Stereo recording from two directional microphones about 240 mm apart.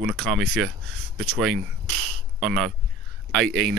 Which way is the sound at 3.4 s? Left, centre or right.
Right.